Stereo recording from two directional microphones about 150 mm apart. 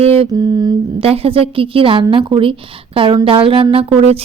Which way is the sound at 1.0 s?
40° right (ahead or behind).